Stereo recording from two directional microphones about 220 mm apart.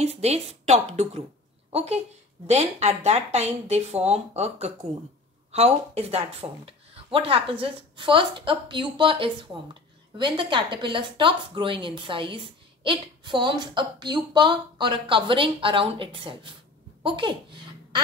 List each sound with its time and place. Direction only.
0.0 s a woman's voice: 30° right (ahead or behind)